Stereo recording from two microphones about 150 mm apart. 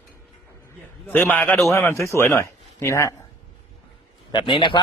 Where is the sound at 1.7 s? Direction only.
15° left (ahead or behind).